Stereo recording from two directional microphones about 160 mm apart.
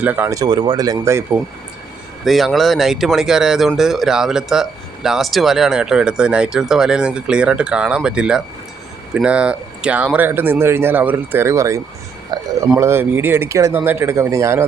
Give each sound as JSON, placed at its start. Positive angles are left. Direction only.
{"t": 0.0, "sound": "speech", "side_deg": -10}
{"t": 2.2, "sound": "speech", "side_deg": 0}
{"t": 12.3, "sound": "a sound", "side_deg": -25}
{"t": 12.8, "sound": "speech", "side_deg": -15}